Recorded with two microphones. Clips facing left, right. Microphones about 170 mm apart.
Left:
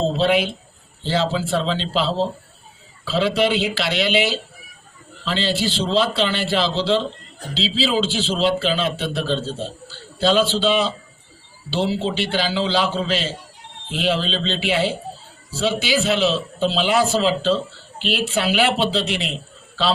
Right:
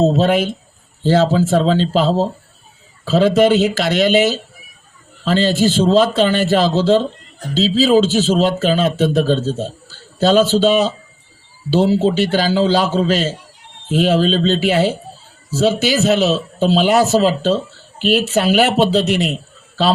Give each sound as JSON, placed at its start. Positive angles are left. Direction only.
{"t": 0.0, "sound": "a man's voice", "side_deg": -45}